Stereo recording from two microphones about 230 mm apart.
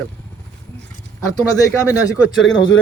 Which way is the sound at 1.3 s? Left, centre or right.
Centre.